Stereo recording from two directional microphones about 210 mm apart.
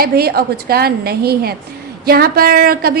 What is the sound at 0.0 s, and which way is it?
Speech, 45° right (ahead or behind).